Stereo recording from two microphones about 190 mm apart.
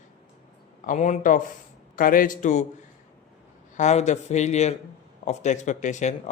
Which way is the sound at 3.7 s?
35° left (ahead or behind).